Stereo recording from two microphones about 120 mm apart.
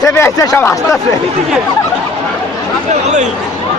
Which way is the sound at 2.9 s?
75° right (ahead or behind).